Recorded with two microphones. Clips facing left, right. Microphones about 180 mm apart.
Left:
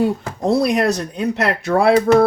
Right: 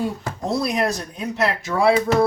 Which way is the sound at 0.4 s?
65° left (ahead or behind).